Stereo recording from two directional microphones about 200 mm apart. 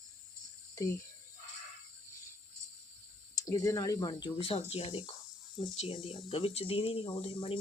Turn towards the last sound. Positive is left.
turn(degrees=25)  # may be behind; listen again after turning